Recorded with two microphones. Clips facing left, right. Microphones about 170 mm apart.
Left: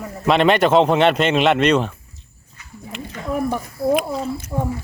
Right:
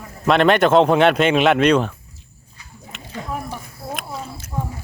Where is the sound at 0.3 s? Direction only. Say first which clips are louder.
Even; centre (ahead or behind).